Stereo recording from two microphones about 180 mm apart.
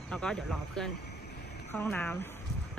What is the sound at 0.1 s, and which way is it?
Speech, 5° left (ahead or behind).